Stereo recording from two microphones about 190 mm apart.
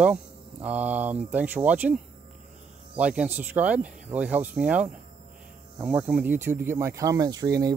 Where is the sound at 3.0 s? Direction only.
5° right (ahead or behind).